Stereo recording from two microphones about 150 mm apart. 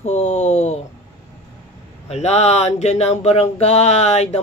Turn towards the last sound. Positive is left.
turn(degrees=45)  # may be behind; listen again after turning